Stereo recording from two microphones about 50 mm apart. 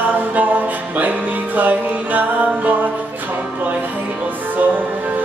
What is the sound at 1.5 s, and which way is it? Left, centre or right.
Music, right.